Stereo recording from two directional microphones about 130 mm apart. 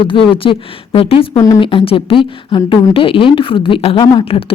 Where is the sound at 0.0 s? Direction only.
40° left (ahead or behind).